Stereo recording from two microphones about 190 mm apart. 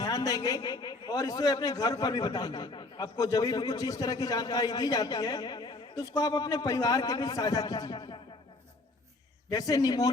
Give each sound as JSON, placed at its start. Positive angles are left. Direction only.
{"t": 0.0, "sound": "a man's voice", "side_deg": 20}
{"t": 9.5, "sound": "a man's voice", "side_deg": 20}